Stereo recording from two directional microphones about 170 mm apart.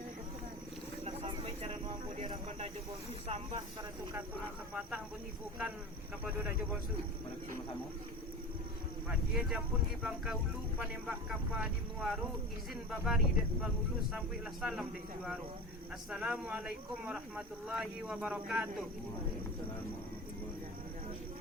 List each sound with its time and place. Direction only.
1.0 s a sound: 35° right (ahead or behind)
3.2 s speech: 40° right (ahead or behind)
4.7 s speech: 10° right (ahead or behind)
9.0 s speech: centre (ahead or behind)